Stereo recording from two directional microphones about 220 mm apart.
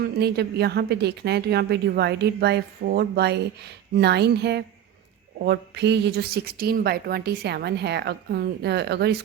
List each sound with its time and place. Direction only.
0.0 s speech: 45° right (ahead or behind)